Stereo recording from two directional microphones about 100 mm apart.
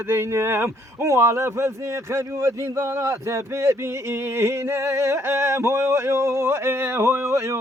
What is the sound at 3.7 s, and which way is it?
Speech, 25° right (ahead or behind).